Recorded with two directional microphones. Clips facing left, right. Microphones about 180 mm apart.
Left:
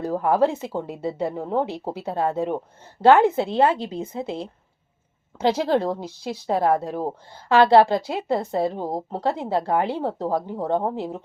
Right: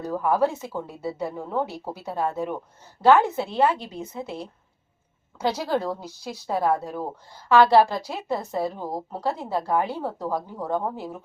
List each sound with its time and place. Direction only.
0.0 s speech: 25° left (ahead or behind)